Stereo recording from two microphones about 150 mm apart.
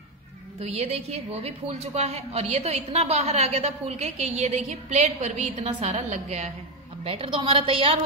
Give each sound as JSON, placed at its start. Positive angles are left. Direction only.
{"t": 0.6, "sound": "a woman's voice", "side_deg": -45}
{"t": 7.1, "sound": "a woman's voice", "side_deg": -40}